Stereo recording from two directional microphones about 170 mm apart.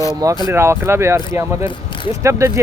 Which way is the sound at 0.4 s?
15° right (ahead or behind).